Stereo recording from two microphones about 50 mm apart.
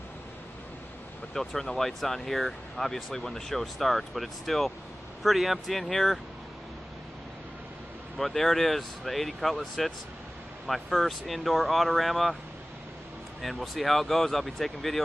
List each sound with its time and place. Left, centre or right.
1.5 s speech: centre
8.2 s speech: centre
13.4 s speech: centre